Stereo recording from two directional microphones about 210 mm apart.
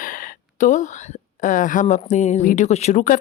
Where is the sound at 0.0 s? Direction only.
40° left (ahead or behind).